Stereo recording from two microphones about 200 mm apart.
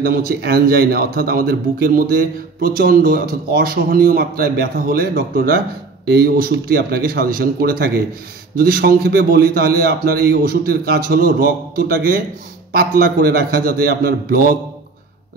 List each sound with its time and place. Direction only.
0.0 s speech: 50° right (ahead or behind)